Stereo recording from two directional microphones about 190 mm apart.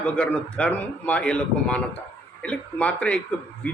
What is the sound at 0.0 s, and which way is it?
A man's voice, 5° left (ahead or behind).